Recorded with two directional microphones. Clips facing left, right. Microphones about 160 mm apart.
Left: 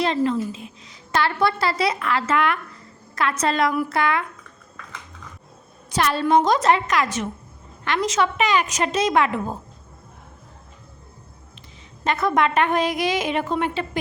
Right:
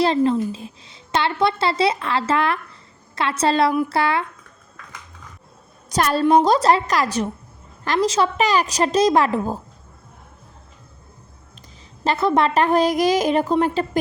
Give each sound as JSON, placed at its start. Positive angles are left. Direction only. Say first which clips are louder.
{"t": 0.0, "sound": "a woman's voice", "louder": "right 3 dB", "side_deg": -30}
{"t": 5.9, "sound": "a woman's voice", "louder": "right 3 dB", "side_deg": -40}
{"t": 12.0, "sound": "a woman's voice", "louder": "right 2 dB", "side_deg": -30}